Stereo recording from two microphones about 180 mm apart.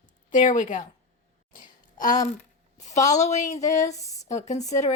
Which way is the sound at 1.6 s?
45° left (ahead or behind).